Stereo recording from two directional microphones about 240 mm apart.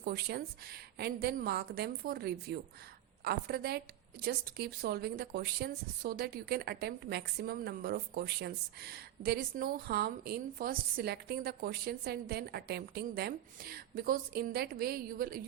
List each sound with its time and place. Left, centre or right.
0.0 s a woman's voice: right